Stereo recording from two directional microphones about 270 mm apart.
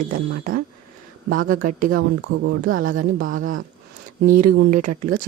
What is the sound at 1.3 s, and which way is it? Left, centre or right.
A woman's voice, right.